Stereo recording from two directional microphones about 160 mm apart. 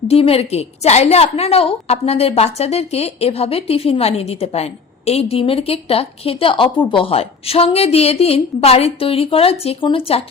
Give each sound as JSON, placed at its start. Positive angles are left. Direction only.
{"t": 0.1, "sound": "a woman's voice", "side_deg": 40}